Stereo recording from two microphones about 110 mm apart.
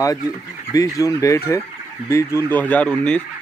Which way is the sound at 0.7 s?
30° left (ahead or behind).